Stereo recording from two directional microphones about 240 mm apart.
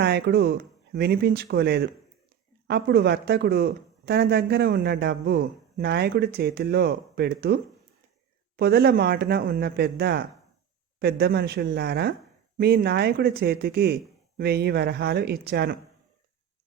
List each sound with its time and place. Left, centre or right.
0.0 s speech: right